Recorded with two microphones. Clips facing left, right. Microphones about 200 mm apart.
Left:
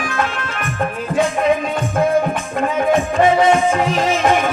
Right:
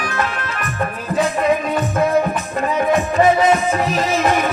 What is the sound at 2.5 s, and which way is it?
Music, 30° left (ahead or behind).